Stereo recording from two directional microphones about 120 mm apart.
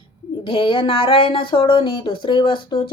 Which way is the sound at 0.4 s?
45° left (ahead or behind).